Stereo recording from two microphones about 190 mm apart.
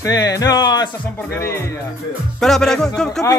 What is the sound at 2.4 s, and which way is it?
Speech, centre (ahead or behind).